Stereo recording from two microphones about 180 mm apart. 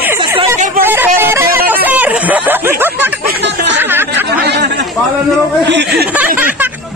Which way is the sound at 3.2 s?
70° right (ahead or behind).